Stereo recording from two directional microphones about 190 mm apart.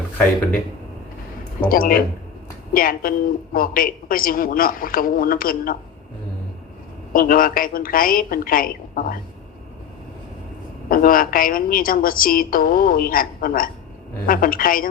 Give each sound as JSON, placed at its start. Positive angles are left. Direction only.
{"t": 1.6, "sound": "a woman's voice", "side_deg": 50}
{"t": 7.1, "sound": "a woman's voice", "side_deg": 50}
{"t": 10.8, "sound": "a woman's voice", "side_deg": 50}